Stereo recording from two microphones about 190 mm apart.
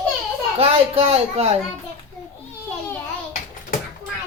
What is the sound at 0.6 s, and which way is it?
Speech, 30° right (ahead or behind).